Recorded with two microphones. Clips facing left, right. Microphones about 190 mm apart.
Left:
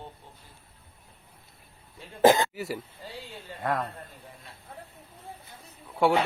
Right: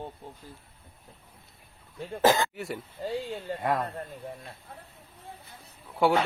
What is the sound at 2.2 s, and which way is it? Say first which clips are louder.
Speech: left 3 dB; 20° left (ahead or behind).